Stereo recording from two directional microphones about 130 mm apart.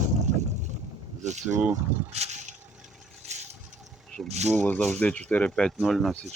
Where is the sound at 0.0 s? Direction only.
65° right (ahead or behind).